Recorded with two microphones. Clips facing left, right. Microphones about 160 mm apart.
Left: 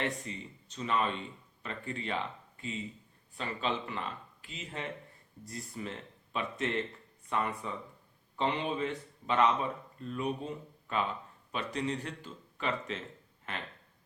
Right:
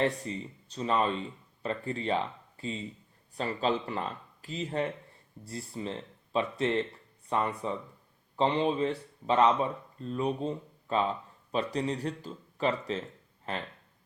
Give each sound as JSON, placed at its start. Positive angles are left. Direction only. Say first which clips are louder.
{"t": 0.0, "sound": "speech", "louder": "right 6 dB", "side_deg": -35}